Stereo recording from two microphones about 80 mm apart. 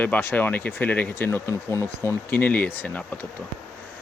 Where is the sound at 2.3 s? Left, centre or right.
Left.